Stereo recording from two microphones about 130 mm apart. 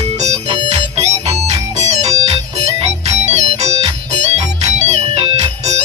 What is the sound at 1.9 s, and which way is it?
Music, 60° right (ahead or behind).